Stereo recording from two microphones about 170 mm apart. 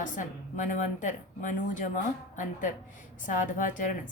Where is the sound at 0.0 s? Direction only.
50° left (ahead or behind).